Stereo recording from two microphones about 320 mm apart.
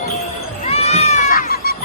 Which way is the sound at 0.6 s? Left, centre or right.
Centre.